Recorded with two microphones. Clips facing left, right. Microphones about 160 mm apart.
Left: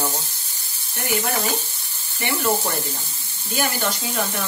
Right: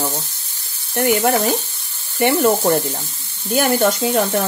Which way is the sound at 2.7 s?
45° right (ahead or behind).